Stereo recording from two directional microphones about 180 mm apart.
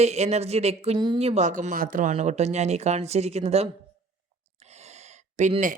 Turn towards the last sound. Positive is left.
turn(degrees=-45)  # may be behind; listen again after turning